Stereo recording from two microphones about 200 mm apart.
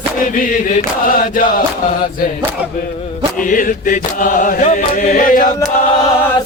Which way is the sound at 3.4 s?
40° left (ahead or behind).